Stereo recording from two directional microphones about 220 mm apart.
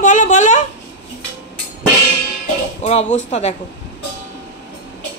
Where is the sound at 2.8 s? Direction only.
30° left (ahead or behind).